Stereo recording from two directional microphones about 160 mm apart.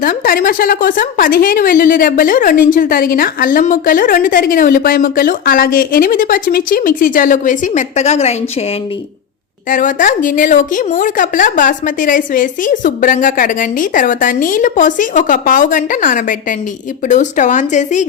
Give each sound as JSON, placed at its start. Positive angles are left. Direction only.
{"t": 0.0, "sound": "a woman's voice", "side_deg": 60}
{"t": 9.6, "sound": "a woman's voice", "side_deg": 55}